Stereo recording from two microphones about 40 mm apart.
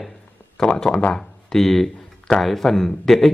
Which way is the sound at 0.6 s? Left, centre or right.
Centre.